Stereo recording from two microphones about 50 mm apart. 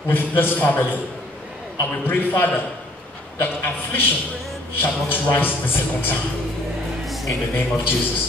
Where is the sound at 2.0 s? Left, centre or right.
Left.